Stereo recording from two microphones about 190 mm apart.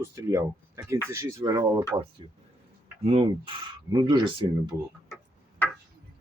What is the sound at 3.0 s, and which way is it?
Speech, 30° right (ahead or behind).